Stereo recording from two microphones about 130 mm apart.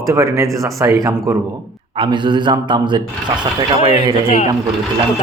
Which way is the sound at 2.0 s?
35° right (ahead or behind).